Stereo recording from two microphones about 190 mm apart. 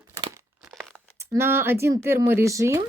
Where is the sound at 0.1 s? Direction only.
25° right (ahead or behind).